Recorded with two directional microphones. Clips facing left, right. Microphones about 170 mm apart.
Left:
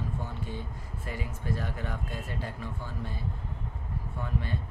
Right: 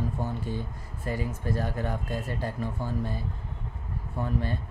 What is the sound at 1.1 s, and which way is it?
Speech, 40° right (ahead or behind).